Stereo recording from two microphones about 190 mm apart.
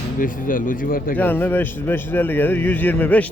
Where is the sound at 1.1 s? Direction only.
10° left (ahead or behind).